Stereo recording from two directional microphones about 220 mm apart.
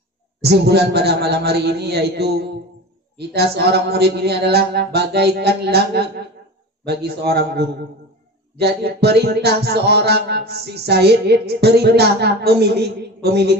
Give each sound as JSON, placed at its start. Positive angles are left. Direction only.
{"t": 0.4, "sound": "music", "side_deg": -50}